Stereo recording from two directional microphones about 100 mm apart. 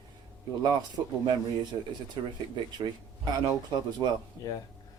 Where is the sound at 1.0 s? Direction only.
40° right (ahead or behind).